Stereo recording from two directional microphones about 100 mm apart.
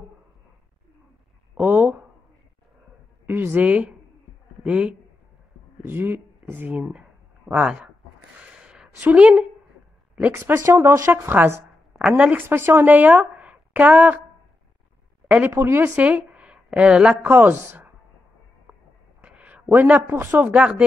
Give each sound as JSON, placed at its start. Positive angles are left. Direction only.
{"t": 1.5, "sound": "a sound", "side_deg": -15}
{"t": 3.3, "sound": "a woman's voice", "side_deg": -20}
{"t": 5.8, "sound": "speech", "side_deg": -20}
{"t": 8.4, "sound": "a sound", "side_deg": -10}
{"t": 10.3, "sound": "a woman's voice", "side_deg": -25}
{"t": 15.2, "sound": "speech", "side_deg": -15}
{"t": 15.5, "sound": "speech", "side_deg": -30}
{"t": 15.8, "sound": "speech", "side_deg": -15}
{"t": 19.2, "sound": "a sound", "side_deg": -15}
{"t": 19.7, "sound": "speech", "side_deg": -20}